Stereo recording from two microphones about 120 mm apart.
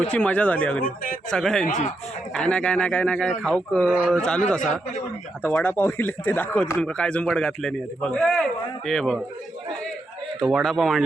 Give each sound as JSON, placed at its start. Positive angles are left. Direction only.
{"t": 0.1, "sound": "speech", "side_deg": 10}
{"t": 4.6, "sound": "a man's voice", "side_deg": 80}
{"t": 5.4, "sound": "speech", "side_deg": 15}
{"t": 10.4, "sound": "speech", "side_deg": 0}